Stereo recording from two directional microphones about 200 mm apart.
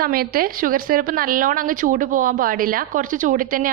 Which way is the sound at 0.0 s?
45° right (ahead or behind).